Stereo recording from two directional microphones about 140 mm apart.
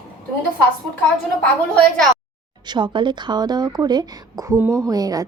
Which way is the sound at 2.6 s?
30° right (ahead or behind).